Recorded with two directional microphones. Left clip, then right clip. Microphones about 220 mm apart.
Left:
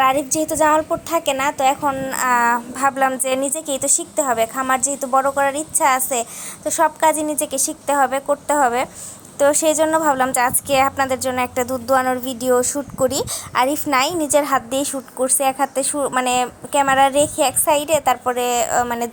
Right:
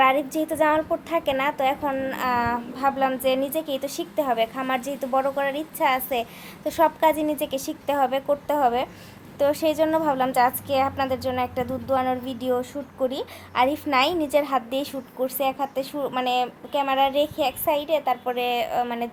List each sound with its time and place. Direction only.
0.0 s a woman's voice: 25° left (ahead or behind)